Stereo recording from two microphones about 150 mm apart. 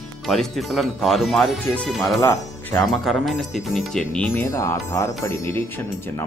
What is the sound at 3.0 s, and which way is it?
Speech, centre (ahead or behind).